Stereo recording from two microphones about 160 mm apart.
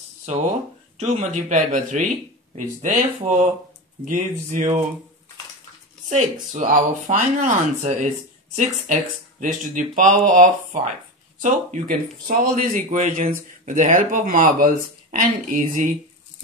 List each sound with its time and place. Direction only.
0.3 s speech: 45° right (ahead or behind)
6.5 s speech: 50° right (ahead or behind)